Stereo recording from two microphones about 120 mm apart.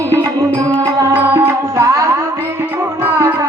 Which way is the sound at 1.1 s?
15° right (ahead or behind).